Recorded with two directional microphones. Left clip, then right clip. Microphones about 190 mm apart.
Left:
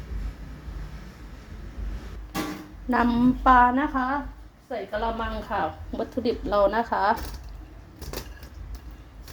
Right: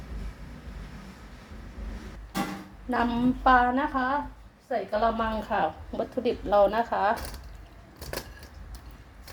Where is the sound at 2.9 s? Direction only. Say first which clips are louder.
Left 4 dB; 20° left (ahead or behind).